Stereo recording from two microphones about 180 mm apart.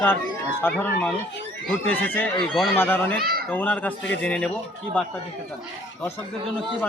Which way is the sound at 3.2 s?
60° right (ahead or behind).